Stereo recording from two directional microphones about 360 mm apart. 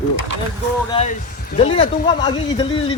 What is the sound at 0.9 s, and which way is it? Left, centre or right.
Speech, centre.